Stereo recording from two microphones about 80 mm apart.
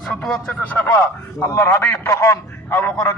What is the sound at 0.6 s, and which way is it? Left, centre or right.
A man's voice, left.